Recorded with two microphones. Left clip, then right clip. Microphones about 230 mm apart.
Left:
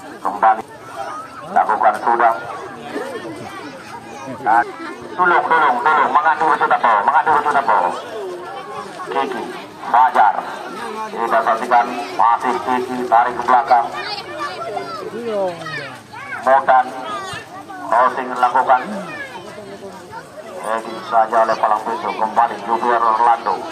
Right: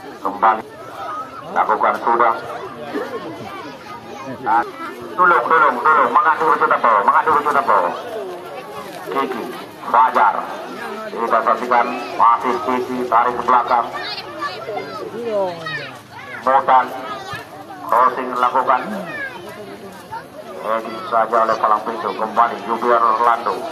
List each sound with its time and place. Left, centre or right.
0.2 s a sound: centre
1.6 s speech: centre
5.1 s speech: centre
9.8 s speech: centre
16.4 s speech: centre
17.8 s speech: left
20.6 s speech: left